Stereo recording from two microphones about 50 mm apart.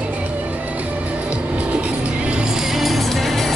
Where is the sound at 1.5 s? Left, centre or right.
Right; by 3.5 s centre.